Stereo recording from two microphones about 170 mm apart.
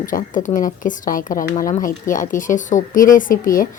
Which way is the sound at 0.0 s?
50° left (ahead or behind).